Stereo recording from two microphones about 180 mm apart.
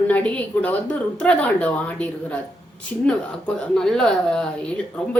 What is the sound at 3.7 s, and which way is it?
Speech, 5° left (ahead or behind).